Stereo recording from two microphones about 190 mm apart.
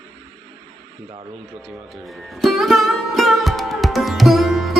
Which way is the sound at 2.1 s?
Centre (ahead or behind).